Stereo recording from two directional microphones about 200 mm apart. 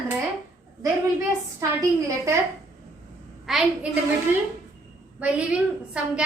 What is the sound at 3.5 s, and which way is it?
Speech, centre (ahead or behind).